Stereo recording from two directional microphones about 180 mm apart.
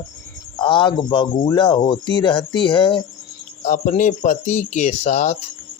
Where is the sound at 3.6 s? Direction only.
45° left (ahead or behind).